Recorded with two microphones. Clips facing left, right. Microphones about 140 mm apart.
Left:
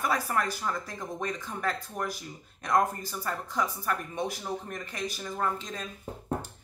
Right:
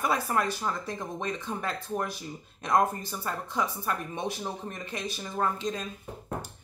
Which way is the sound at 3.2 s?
20° right (ahead or behind).